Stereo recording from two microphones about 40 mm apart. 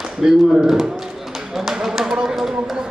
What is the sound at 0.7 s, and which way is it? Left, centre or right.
Run, centre.